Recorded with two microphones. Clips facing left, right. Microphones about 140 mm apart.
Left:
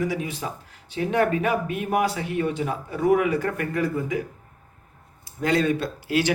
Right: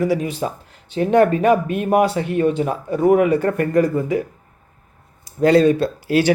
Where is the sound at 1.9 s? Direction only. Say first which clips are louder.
Right 7 dB; 35° right (ahead or behind).